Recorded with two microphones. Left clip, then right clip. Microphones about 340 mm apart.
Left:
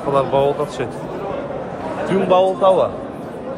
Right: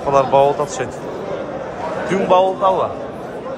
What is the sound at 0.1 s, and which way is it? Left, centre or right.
Speech, centre.